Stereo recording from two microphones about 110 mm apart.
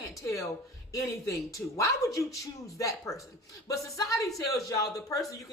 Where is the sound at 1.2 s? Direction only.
30° left (ahead or behind).